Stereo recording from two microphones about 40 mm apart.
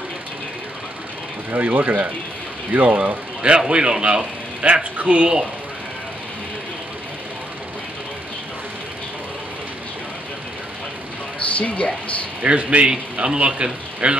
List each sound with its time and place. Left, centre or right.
1.5 s speech: right
11.3 s a sound: left
12.4 s a man's voice: right